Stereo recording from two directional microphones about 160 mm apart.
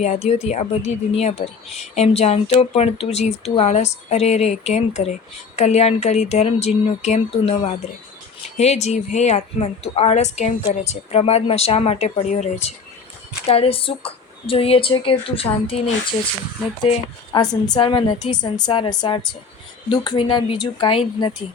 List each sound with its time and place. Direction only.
0.0 s speech: 45° left (ahead or behind)
13.5 s speech: 35° left (ahead or behind)
17.3 s a woman's voice: 25° left (ahead or behind)